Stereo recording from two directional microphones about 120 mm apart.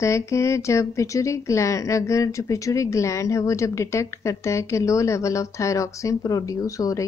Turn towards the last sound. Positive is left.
turn(degrees=30)  # may be behind; listen again after turning